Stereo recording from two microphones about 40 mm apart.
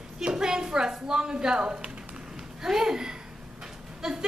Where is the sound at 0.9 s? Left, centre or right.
Centre.